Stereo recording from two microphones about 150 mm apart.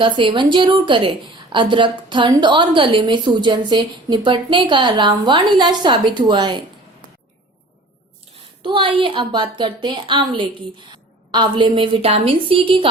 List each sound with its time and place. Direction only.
0.0 s a woman's voice: 35° right (ahead or behind)
8.6 s a woman's voice: 35° right (ahead or behind)